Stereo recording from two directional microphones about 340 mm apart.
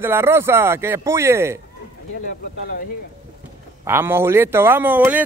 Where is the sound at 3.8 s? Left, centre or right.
Centre.